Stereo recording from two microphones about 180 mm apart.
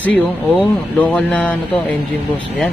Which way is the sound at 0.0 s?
10° left (ahead or behind).